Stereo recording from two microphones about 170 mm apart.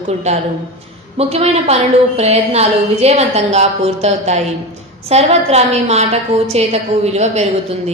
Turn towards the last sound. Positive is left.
turn(degrees=-40)  # may be behind; listen again after turning